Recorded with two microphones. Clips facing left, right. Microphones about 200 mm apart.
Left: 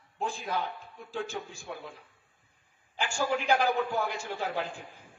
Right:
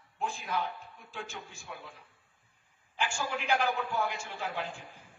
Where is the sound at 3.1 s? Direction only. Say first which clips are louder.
Left 5 dB; 35° left (ahead or behind).